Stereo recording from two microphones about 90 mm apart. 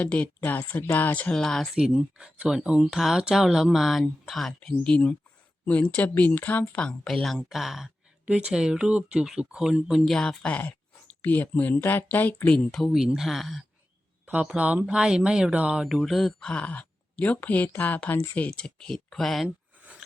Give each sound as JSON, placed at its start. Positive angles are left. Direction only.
{"t": 0.0, "sound": "speech", "side_deg": 15}
{"t": 1.7, "sound": "speech", "side_deg": -5}
{"t": 10.2, "sound": "speech", "side_deg": 10}
{"t": 12.5, "sound": "speech", "side_deg": 5}
{"t": 12.9, "sound": "speech", "side_deg": -5}
{"t": 14.3, "sound": "speech", "side_deg": -15}